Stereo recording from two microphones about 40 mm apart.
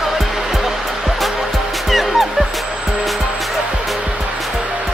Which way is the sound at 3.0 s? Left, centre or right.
Centre.